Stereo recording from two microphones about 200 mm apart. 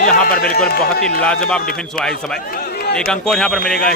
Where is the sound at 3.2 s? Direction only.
Centre (ahead or behind).